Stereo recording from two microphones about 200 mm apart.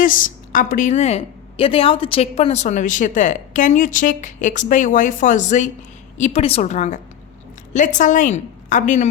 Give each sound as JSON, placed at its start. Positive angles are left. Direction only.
{"t": 0.0, "sound": "a woman's voice", "side_deg": 40}